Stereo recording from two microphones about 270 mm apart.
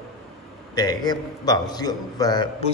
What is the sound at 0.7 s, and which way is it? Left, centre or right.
A man's voice, centre.